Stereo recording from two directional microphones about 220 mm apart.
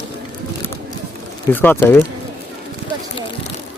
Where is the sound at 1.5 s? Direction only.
10° left (ahead or behind).